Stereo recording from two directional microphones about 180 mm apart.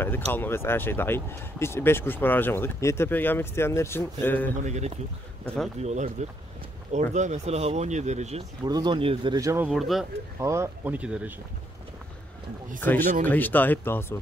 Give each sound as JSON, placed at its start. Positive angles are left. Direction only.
{"t": 0.3, "sound": "speech", "side_deg": 10}
{"t": 4.6, "sound": "speech", "side_deg": -40}
{"t": 8.6, "sound": "speech", "side_deg": -25}
{"t": 9.7, "sound": "speech", "side_deg": 0}
{"t": 10.4, "sound": "speech", "side_deg": -15}
{"t": 12.8, "sound": "speech", "side_deg": 10}